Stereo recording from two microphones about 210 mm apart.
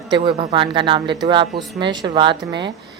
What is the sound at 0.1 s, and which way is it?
A woman's voice, 25° right (ahead or behind).